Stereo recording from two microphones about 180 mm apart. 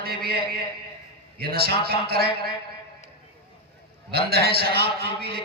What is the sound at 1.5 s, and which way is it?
Speech, 60° right (ahead or behind).